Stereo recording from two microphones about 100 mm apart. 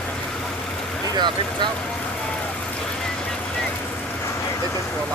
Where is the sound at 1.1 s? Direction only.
50° right (ahead or behind).